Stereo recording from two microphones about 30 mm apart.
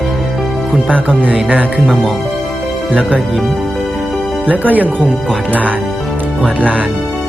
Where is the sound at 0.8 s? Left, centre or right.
Left.